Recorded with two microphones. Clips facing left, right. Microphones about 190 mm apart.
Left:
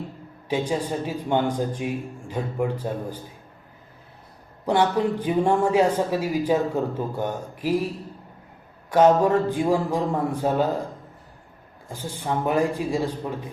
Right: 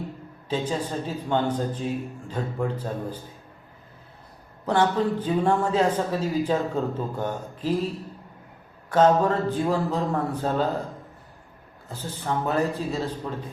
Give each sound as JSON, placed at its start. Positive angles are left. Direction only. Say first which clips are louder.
{"t": 0.4, "sound": "speech", "louder": "left 2 dB", "side_deg": 10}
{"t": 4.6, "sound": "speech", "louder": "left 1 dB", "side_deg": 15}
{"t": 8.9, "sound": "speech", "louder": "left 2 dB", "side_deg": 10}
{"t": 11.9, "sound": "speech", "louder": "left 1 dB", "side_deg": 10}